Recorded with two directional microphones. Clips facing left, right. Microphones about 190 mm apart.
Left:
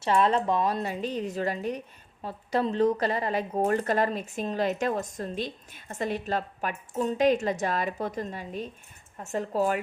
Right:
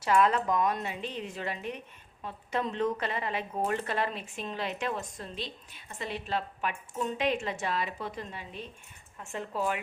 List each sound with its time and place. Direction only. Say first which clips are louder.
0.0 s a woman's voice: left 2 dB; 30° left (ahead or behind)